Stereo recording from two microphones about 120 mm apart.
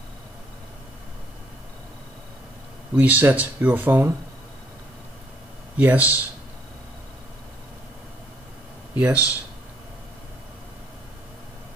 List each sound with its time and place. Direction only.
3.0 s speech: 15° right (ahead or behind)
5.8 s speech: 15° right (ahead or behind)
8.9 s speech: 10° right (ahead or behind)